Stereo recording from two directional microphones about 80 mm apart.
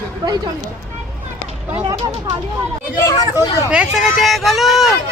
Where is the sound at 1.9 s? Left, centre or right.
Right.